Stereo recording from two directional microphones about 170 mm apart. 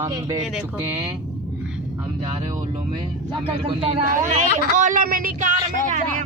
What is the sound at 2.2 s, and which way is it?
Vehicle, 35° right (ahead or behind).